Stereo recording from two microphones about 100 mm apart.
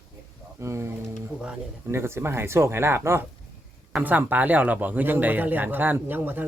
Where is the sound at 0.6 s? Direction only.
30° right (ahead or behind).